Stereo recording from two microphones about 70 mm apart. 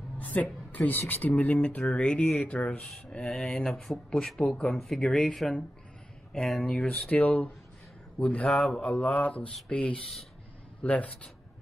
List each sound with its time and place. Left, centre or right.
0.2 s speech: left
3.3 s speech: centre
7.2 s speech: centre
8.5 s speech: centre
8.8 s speech: centre